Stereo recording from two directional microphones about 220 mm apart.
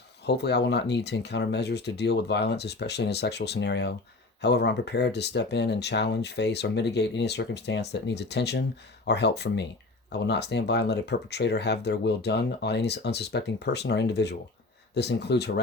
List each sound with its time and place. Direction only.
0.3 s speech: 50° left (ahead or behind)